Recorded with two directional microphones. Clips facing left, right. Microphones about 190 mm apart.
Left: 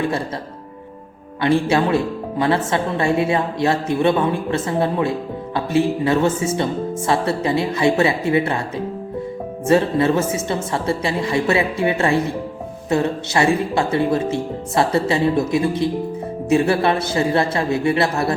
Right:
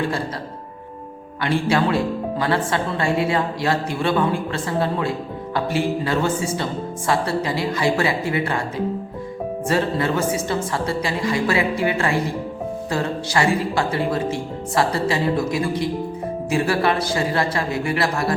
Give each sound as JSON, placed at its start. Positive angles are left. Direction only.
{"t": 1.4, "sound": "speech", "side_deg": 25}
{"t": 9.6, "sound": "speech", "side_deg": 25}